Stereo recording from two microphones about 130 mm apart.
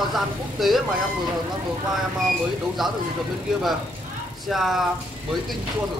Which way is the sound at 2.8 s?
Centre (ahead or behind).